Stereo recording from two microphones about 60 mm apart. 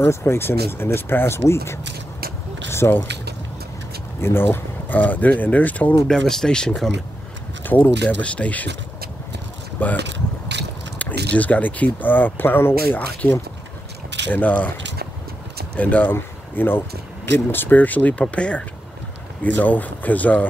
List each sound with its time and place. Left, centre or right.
0.0 s speech: left
4.2 s speech: left
6.0 s speech: centre
7.6 s speech: left
9.8 s speech: left
11.0 s speech: left
14.3 s speech: left
15.7 s speech: left